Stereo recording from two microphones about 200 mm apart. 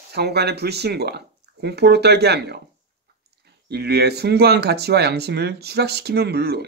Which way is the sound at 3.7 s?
55° right (ahead or behind).